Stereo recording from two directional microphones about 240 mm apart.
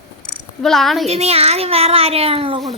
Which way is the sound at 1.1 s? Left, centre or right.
Right.